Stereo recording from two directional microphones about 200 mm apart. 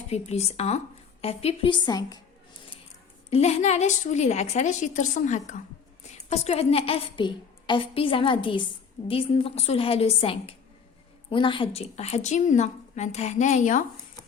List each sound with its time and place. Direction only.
0.1 s a woman's voice: 30° left (ahead or behind)
3.2 s a woman's voice: 30° left (ahead or behind)